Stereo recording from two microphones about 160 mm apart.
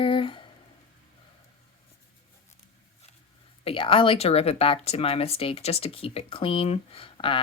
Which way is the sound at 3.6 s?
35° left (ahead or behind).